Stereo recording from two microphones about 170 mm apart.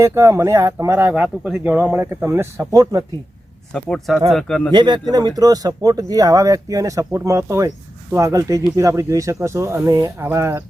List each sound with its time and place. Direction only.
0.0 s speech: 15° right (ahead or behind)
3.7 s speech: 5° left (ahead or behind)
4.7 s speech: 25° right (ahead or behind)